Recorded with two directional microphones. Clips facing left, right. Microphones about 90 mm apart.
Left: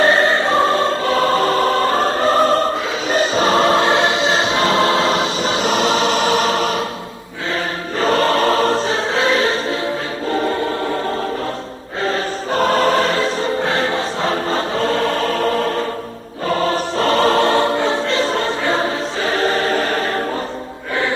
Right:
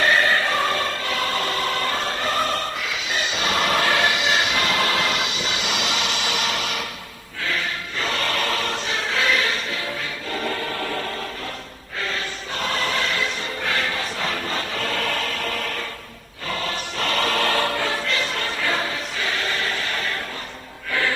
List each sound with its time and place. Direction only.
0.0 s music: 30° left (ahead or behind)
7.9 s choir: 35° left (ahead or behind)
12.0 s music: 35° left (ahead or behind)